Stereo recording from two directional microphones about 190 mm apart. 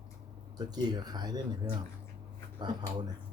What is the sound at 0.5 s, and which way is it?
Speech, 20° right (ahead or behind).